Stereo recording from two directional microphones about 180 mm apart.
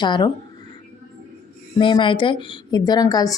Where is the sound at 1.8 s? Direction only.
25° left (ahead or behind).